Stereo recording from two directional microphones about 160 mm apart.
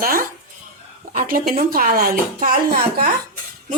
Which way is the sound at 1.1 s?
60° right (ahead or behind).